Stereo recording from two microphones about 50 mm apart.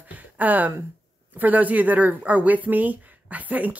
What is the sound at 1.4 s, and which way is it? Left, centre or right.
Speech, right.